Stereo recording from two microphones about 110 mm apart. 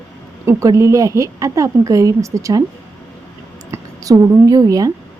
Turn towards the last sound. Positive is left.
turn(degrees=-35)  # may be behind; listen again after turning